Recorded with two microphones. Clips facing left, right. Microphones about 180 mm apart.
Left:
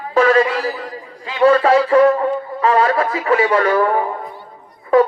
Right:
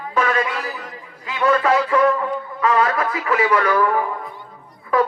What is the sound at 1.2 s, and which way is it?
Music, 30° left (ahead or behind).